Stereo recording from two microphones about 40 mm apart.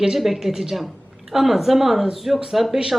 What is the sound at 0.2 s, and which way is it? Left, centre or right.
Speech, centre.